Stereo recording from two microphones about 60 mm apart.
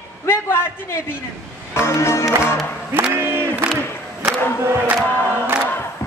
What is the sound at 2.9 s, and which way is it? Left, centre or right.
Battle cry, right.